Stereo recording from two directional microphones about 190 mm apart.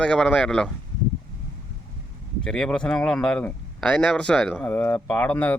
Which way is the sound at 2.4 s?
5° left (ahead or behind).